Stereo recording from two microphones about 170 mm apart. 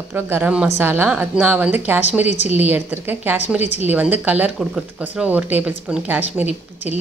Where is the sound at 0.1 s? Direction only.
10° right (ahead or behind).